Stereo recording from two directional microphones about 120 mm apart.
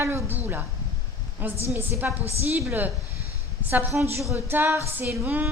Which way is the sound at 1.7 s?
20° right (ahead or behind).